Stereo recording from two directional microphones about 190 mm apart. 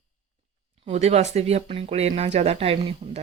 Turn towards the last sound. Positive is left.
turn(degrees=-30)  # may be behind; listen again after turning